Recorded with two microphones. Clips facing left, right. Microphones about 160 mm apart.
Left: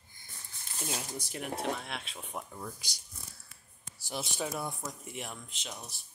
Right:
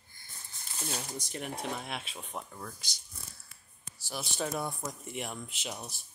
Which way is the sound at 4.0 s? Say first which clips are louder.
Left 2 dB; 25° left (ahead or behind).